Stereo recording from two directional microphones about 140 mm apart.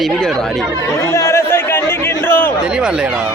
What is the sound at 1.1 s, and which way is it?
Chatter, 20° left (ahead or behind).